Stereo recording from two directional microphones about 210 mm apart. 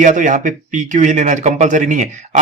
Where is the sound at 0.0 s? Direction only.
35° right (ahead or behind).